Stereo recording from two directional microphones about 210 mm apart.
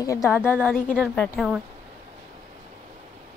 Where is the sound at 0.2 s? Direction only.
Centre (ahead or behind).